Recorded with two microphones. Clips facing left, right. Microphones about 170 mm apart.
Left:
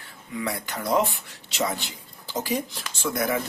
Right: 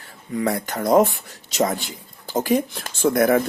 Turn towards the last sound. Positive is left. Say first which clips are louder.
# right 9 dB
turn(degrees=-50)  # may be behind; listen again after turning